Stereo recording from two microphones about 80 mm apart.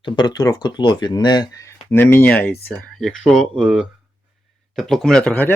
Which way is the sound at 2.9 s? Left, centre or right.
Centre.